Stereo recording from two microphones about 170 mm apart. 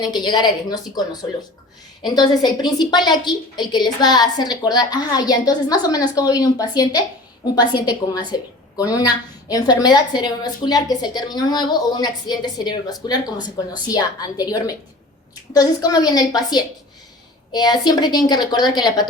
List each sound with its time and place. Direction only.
0.0 s a woman's voice: 25° left (ahead or behind)